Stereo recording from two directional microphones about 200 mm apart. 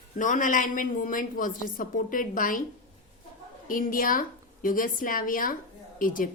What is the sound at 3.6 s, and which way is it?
A woman's voice, 45° left (ahead or behind).